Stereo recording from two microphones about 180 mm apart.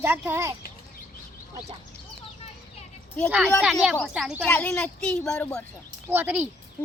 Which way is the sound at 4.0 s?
Centre (ahead or behind).